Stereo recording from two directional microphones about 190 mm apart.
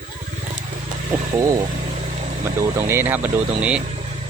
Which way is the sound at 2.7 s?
15° right (ahead or behind).